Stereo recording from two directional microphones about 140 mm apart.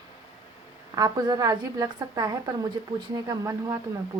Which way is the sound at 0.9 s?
25° right (ahead or behind).